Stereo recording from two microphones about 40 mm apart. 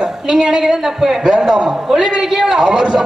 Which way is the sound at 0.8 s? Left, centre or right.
Centre.